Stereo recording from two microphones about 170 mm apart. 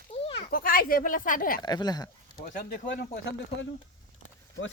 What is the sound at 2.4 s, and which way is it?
Speech, 55° left (ahead or behind).